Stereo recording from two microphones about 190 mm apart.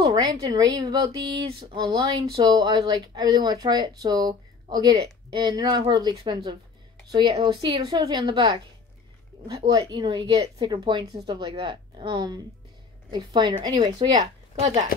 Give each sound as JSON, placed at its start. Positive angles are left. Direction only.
{"t": 0.0, "sound": "speech", "side_deg": -20}